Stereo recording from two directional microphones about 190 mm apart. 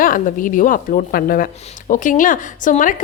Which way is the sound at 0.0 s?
45° left (ahead or behind).